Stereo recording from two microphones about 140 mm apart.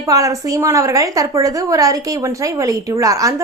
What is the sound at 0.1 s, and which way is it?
A woman's voice, 25° right (ahead or behind).